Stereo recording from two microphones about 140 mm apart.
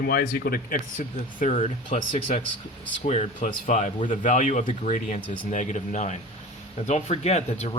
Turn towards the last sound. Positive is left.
turn(degrees=55)  # may be behind; listen again after turning